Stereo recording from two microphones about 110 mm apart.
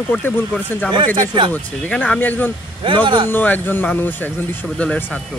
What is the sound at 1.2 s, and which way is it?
Speech, 45° right (ahead or behind).